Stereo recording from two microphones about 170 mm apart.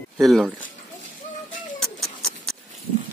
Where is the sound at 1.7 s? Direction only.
Centre (ahead or behind).